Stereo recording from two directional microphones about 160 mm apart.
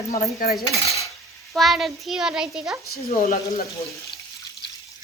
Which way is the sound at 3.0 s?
70° left (ahead or behind).